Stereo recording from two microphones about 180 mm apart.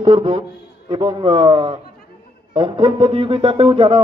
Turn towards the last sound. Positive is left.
turn(degrees=-25)  # may be behind; listen again after turning